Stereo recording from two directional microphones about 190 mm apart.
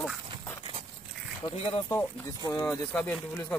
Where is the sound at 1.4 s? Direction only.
25° left (ahead or behind).